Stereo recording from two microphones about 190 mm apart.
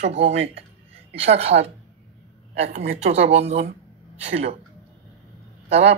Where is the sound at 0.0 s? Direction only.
35° right (ahead or behind).